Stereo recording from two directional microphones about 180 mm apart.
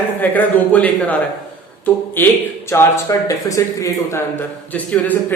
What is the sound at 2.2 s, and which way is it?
Speech, 10° left (ahead or behind).